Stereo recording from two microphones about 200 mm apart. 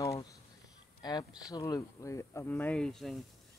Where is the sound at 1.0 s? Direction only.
20° left (ahead or behind).